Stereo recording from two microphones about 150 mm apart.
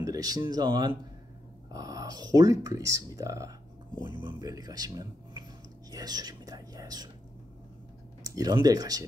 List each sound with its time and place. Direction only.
0.0 s speech: 25° right (ahead or behind)
8.2 s speech: 25° right (ahead or behind)